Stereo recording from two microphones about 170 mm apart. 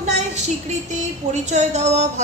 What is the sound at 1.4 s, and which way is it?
Speech, 40° right (ahead or behind).